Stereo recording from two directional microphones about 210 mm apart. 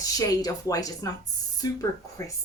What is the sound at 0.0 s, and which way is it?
Speech, 15° left (ahead or behind).